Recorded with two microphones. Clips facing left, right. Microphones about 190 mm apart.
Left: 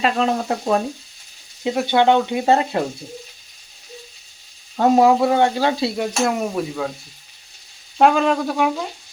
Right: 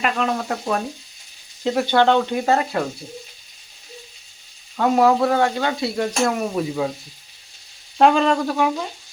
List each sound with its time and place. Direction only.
0.0 s frying: 25° left (ahead or behind)
1.6 s stir: 10° left (ahead or behind)
2.5 s frying: 25° left (ahead or behind)
5.0 s stir: 15° left (ahead or behind)
5.4 s frying: 30° left (ahead or behind)
6.0 s stir: 10° left (ahead or behind)
6.5 s speech: 5° right (ahead or behind)
7.9 s stir: 5° left (ahead or behind)